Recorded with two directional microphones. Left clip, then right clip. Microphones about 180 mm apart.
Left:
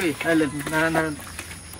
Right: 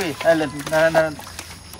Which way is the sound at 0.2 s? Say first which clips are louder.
Right 8 dB; 35° right (ahead or behind).